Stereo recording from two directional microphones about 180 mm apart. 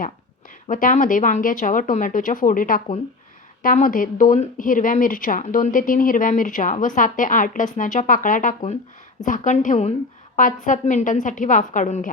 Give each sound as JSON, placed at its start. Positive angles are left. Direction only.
{"t": 0.7, "sound": "speech", "side_deg": 45}